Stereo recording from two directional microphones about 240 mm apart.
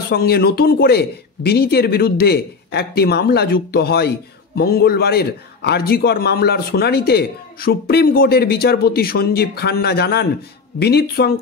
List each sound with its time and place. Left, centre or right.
0.1 s a man's voice: left